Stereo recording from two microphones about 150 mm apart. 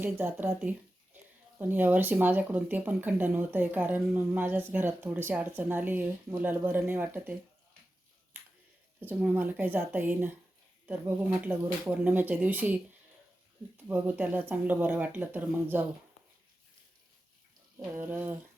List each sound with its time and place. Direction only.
0.0 s speech: 10° right (ahead or behind)
9.0 s speech: 10° right (ahead or behind)
13.8 s speech: 15° right (ahead or behind)
17.9 s speech: 15° right (ahead or behind)